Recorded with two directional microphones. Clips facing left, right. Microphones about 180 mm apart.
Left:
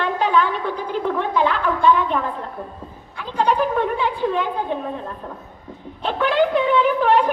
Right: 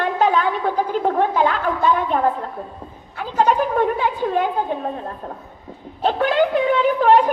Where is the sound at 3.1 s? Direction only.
45° right (ahead or behind).